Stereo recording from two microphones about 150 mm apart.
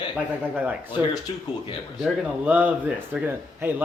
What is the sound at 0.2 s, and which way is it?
A man's voice, 10° right (ahead or behind).